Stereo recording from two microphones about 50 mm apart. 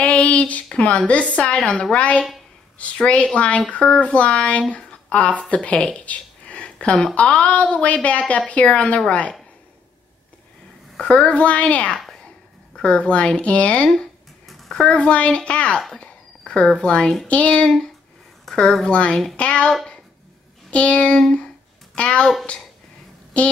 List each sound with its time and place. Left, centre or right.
0.0 s a sound: left
0.7 s a woman's voice: centre
11.0 s a woman's voice: left
14.5 s a sound: centre
15.0 s a woman's voice: left
16.0 s a sound: left
17.3 s a woman's voice: left
18.4 s a woman's voice: centre
18.9 s a woman's voice: left
20.7 s a woman's voice: left
23.3 s a woman's voice: left